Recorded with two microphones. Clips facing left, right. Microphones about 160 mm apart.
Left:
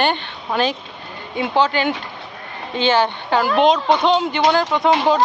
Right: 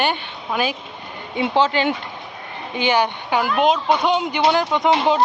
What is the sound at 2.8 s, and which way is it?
Speech, 15° right (ahead or behind).